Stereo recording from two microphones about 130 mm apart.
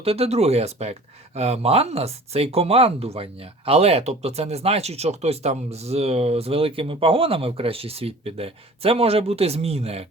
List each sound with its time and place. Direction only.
0.0 s speech: 50° right (ahead or behind)